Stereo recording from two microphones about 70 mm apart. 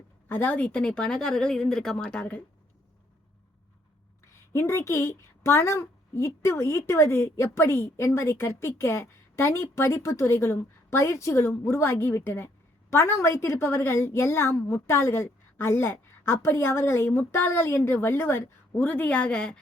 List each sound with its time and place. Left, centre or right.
0.3 s speech: left; by 2.0 s centre
4.5 s a woman's voice: left
18.8 s speech: left